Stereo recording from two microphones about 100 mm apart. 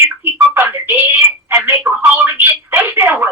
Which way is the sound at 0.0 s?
25° right (ahead or behind).